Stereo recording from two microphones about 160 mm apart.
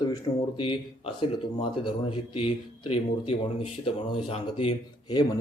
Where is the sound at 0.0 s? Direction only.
25° left (ahead or behind).